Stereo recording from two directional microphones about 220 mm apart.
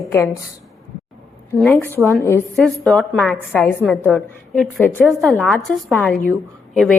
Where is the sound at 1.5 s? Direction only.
5° left (ahead or behind).